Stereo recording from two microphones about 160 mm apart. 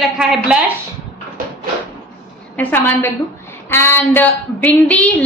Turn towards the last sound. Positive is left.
turn(degrees=10)  # may be behind; listen again after turning